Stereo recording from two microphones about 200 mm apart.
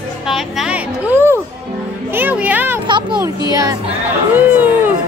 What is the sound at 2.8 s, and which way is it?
A child's voice, 25° right (ahead or behind).